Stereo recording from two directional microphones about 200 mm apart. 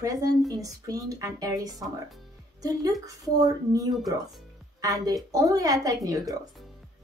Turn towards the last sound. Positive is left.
turn(degrees=-15)  # may be behind; listen again after turning